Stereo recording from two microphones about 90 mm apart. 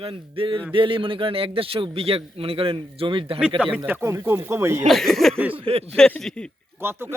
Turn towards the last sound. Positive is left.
turn(degrees=-25)  # may be behind; listen again after turning